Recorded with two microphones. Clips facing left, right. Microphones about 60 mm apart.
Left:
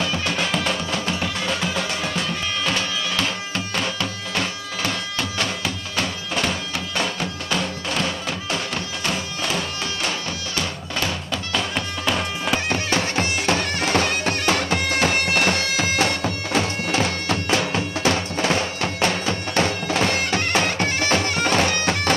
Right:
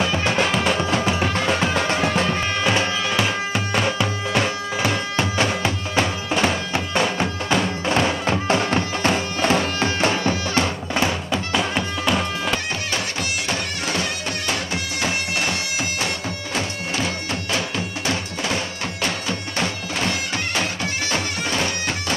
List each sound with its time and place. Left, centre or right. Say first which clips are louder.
0.0 s music: right 4 dB; right
2.6 s music: right 4 dB; right
11.7 s bagpipes: right 2 dB; centre
12.9 s music: left 4 dB; left
16.5 s bagpipes: left 4 dB; left
18.9 s bagpipes: left 3 dB; left